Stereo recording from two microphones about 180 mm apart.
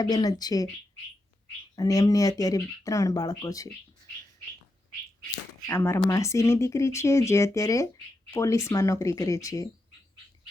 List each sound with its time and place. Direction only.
0.0 s speech: 20° left (ahead or behind)
1.7 s speech: 20° left (ahead or behind)
5.6 s speech: 15° left (ahead or behind)